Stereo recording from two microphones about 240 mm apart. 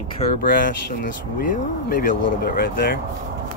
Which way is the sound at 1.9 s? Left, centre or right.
Left.